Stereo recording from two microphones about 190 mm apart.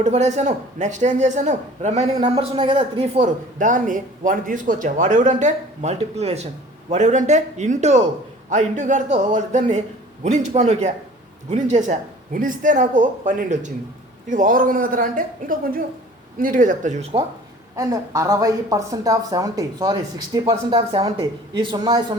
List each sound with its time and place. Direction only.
0.0 s a woman's voice: 35° right (ahead or behind)
17.7 s speech: 15° right (ahead or behind)